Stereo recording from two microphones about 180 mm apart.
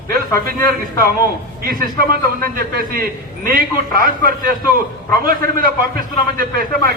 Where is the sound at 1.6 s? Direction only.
55° right (ahead or behind).